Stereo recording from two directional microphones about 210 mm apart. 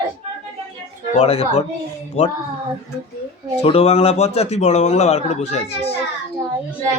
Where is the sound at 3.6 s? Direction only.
30° left (ahead or behind).